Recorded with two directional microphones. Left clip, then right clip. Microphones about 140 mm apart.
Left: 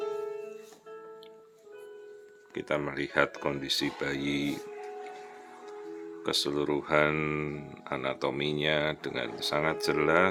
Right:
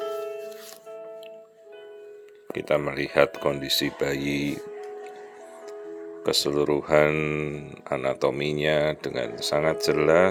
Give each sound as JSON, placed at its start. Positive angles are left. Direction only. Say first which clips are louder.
{"t": 2.5, "sound": "speech", "louder": "right 7 dB", "side_deg": -30}
{"t": 6.2, "sound": "speech", "louder": "right 6 dB", "side_deg": -30}
{"t": 7.1, "sound": "speech", "louder": "right 5 dB", "side_deg": -15}
{"t": 7.9, "sound": "speech", "louder": "right 7 dB", "side_deg": -25}